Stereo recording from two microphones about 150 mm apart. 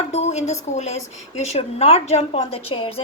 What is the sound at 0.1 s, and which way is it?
A woman's voice, 45° left (ahead or behind).